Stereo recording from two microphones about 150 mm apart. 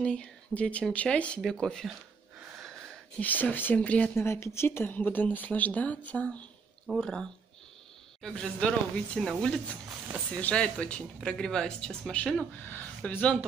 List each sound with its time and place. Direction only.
0.0 s speech: 5° left (ahead or behind)
3.2 s speech: 10° left (ahead or behind)